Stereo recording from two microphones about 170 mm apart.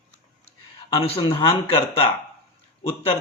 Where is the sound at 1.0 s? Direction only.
35° left (ahead or behind).